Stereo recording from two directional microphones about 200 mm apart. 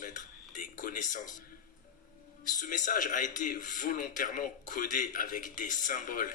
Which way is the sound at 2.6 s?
40° left (ahead or behind).